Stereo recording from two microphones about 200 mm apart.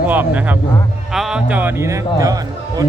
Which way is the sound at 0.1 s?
10° right (ahead or behind).